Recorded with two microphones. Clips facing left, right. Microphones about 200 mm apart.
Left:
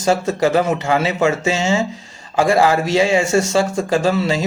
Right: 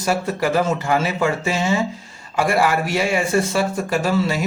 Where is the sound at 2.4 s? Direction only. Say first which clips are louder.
Left 4 dB; 90° left.